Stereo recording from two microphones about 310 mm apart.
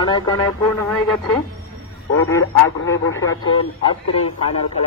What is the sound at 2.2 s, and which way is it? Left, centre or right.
Speech, centre.